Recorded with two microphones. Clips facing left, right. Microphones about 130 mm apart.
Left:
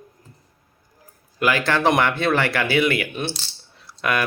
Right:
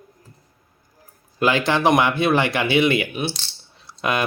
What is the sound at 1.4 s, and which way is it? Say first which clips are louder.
Speech: right 1 dB; 25° right (ahead or behind).